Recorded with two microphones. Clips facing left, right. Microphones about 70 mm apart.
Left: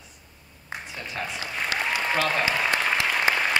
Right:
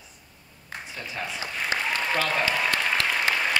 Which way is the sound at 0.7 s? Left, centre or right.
Centre.